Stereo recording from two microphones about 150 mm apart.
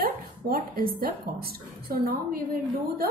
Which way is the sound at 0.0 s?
80° right.